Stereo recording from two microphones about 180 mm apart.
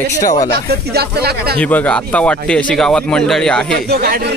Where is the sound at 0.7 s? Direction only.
60° right (ahead or behind).